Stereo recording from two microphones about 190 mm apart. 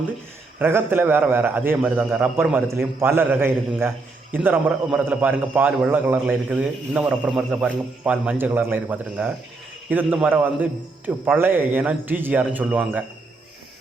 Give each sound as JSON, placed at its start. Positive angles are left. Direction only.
{"t": 0.6, "sound": "a man's voice", "side_deg": -10}